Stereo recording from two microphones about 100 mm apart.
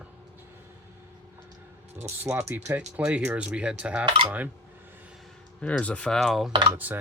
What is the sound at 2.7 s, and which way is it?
Speech, 15° right (ahead or behind).